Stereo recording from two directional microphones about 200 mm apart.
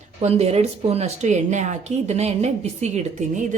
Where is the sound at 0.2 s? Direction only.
30° right (ahead or behind).